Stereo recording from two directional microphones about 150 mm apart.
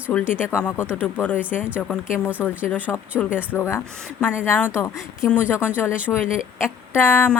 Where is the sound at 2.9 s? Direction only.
5° left (ahead or behind).